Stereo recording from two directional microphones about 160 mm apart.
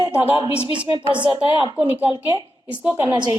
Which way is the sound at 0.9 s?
30° right (ahead or behind).